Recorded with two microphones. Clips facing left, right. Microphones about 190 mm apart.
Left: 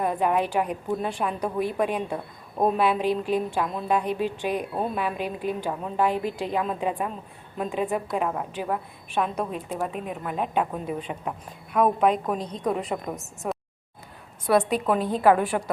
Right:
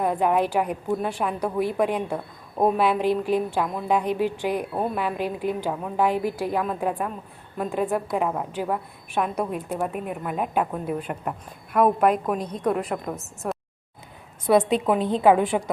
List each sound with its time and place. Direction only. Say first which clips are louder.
0.0 s a woman's voice: right 2 dB; 10° right (ahead or behind)
13.4 s a sound: right 1 dB; centre (ahead or behind)
14.5 s a woman's voice: right 2 dB; 20° right (ahead or behind)